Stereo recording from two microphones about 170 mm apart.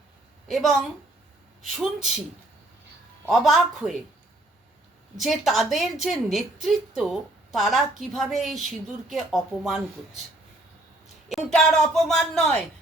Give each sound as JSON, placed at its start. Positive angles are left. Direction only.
{"t": 0.4, "sound": "a woman's voice", "side_deg": 0}
{"t": 3.2, "sound": "a woman's voice", "side_deg": 0}
{"t": 5.2, "sound": "a woman's voice", "side_deg": 0}
{"t": 11.3, "sound": "a woman's voice", "side_deg": 0}